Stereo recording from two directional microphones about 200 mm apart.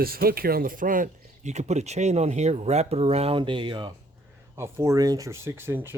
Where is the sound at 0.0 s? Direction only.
50° right (ahead or behind); by 3.9 s 25° right (ahead or behind).